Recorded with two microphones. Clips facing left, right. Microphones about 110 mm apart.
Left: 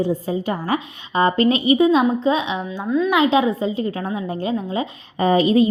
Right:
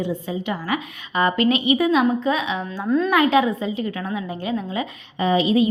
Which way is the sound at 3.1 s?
25° left (ahead or behind).